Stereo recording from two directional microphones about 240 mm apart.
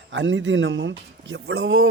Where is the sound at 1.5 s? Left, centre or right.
Right.